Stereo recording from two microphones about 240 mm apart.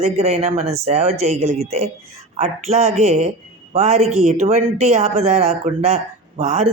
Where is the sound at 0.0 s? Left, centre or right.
Right.